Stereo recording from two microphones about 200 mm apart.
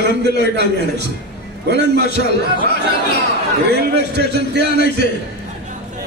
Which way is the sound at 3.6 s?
55° right (ahead or behind).